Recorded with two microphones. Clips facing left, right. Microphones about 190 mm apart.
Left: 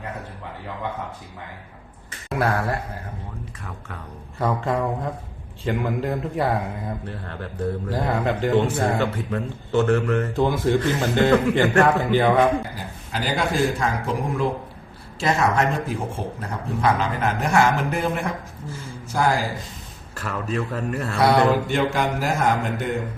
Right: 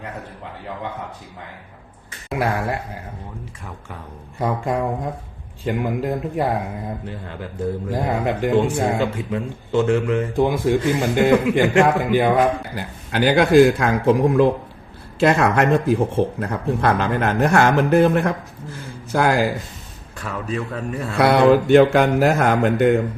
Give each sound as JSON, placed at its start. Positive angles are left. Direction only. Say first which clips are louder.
{"t": 2.4, "sound": "speech", "louder": "right 1 dB", "side_deg": -15}
{"t": 4.4, "sound": "speech", "louder": "right 1 dB", "side_deg": -10}
{"t": 12.7, "sound": "a man's voice", "louder": "right 6 dB", "side_deg": -70}
{"t": 15.2, "sound": "a man's voice", "louder": "right 4 dB", "side_deg": -60}
{"t": 20.1, "sound": "a man's voice", "louder": "even", "side_deg": 0}
{"t": 21.2, "sound": "speech", "louder": "right 5 dB", "side_deg": -70}